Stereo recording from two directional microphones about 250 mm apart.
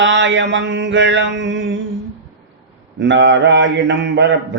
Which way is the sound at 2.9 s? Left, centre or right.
Right.